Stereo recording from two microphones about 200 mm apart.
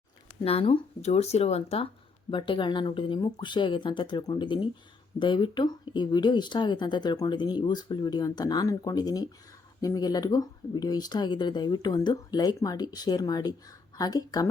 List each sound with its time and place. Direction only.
0.4 s speech: 30° left (ahead or behind)